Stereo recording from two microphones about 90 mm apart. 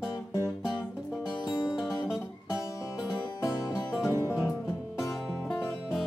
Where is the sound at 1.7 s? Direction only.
5° right (ahead or behind).